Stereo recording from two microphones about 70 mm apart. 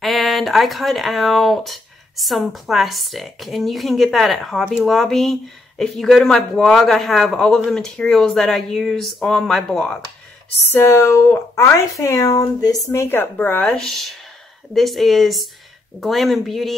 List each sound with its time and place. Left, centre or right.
0.0 s speech: centre
10.7 s a woman's voice: left
12.9 s a woman's voice: left
13.4 s speech: left
13.7 s speech: centre